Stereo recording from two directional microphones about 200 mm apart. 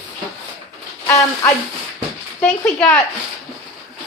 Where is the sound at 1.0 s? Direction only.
15° left (ahead or behind).